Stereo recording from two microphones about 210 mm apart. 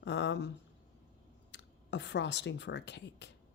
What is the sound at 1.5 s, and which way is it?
Speech, 55° left (ahead or behind).